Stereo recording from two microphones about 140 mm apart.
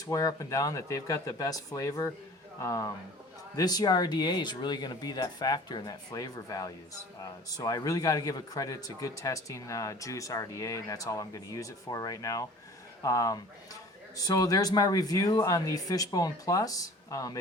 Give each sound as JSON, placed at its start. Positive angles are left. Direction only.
{"t": 0.0, "sound": "a man's voice", "side_deg": 25}